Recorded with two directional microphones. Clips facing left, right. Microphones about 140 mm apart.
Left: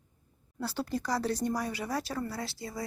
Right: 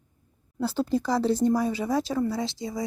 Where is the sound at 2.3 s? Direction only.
90° right.